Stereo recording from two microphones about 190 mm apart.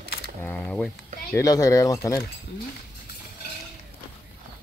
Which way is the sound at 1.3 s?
15° left (ahead or behind).